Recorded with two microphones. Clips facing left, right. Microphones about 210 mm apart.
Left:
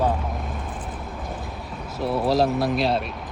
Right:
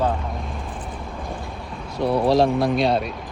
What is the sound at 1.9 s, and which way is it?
Speech, centre (ahead or behind).